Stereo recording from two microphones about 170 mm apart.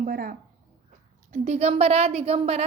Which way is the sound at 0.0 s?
55° right (ahead or behind).